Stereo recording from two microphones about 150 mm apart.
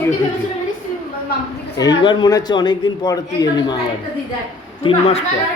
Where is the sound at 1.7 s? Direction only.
25° left (ahead or behind).